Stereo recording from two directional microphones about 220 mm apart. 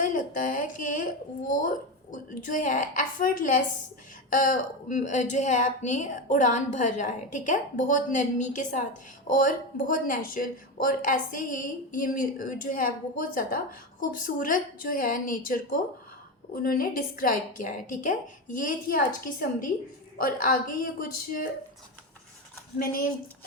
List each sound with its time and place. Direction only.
0.0 s a woman's voice: 35° left (ahead or behind)
22.8 s a woman's voice: 40° left (ahead or behind)